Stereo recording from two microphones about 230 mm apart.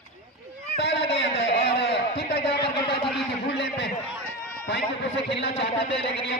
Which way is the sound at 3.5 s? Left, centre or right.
Left.